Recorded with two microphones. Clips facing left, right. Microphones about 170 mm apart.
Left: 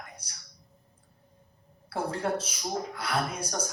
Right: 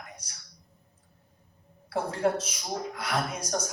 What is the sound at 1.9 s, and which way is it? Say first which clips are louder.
Speech: right 3 dB; 30° left (ahead or behind).